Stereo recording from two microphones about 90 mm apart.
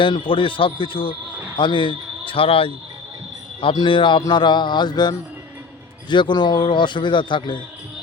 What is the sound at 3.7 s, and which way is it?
Speech, 65° left (ahead or behind).